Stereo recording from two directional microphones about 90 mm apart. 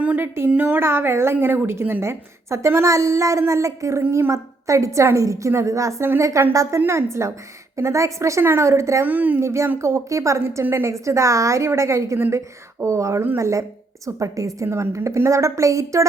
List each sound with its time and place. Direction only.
0.2 s a woman's voice: 25° right (ahead or behind)
9.0 s a woman's voice: 20° right (ahead or behind)
9.4 s a woman's voice: 30° right (ahead or behind)